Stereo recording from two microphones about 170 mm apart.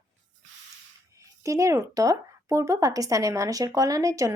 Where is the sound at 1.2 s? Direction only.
20° right (ahead or behind).